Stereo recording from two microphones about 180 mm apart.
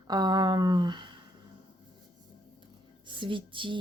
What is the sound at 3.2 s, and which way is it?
Music, 25° right (ahead or behind).